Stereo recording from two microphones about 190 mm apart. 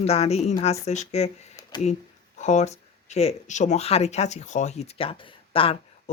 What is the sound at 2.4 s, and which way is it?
Speech, 35° left (ahead or behind).